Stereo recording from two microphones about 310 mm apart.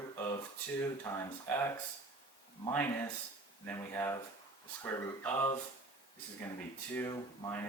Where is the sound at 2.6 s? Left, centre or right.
Centre.